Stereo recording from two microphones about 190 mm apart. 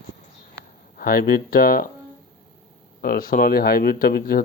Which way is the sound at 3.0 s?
45° left (ahead or behind).